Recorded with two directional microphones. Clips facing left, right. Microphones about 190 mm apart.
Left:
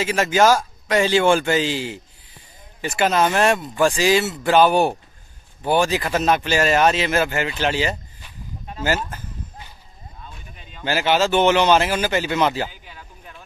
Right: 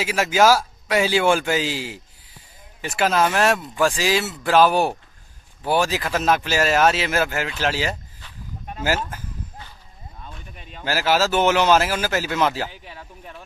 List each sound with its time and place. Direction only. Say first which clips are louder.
0.0 s a man's voice: left 1 dB; 5° right (ahead or behind)
10.8 s speech: left 1 dB; centre (ahead or behind)